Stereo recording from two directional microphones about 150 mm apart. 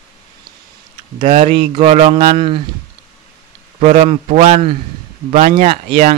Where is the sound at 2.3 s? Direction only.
35° right (ahead or behind).